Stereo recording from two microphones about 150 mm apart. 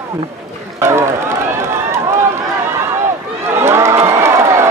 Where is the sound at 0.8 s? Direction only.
20° right (ahead or behind).